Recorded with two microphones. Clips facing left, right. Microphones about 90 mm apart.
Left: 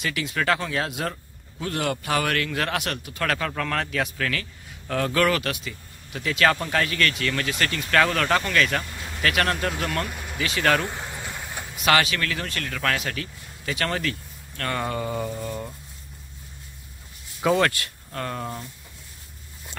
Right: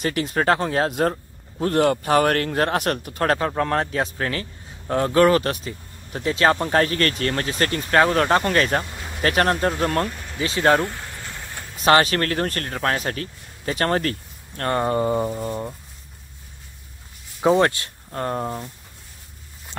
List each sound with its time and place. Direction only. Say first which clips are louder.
0.0 s speech: right 5 dB; 40° right (ahead or behind)
10.0 s speech: right 3 dB; 10° left (ahead or behind)
10.3 s speech: right 4 dB; 30° right (ahead or behind)
10.9 s vehicle: left 1 dB; 20° left (ahead or behind)
11.8 s speech: right 5 dB; 35° right (ahead or behind)
17.4 s speech: right 4 dB; 25° right (ahead or behind)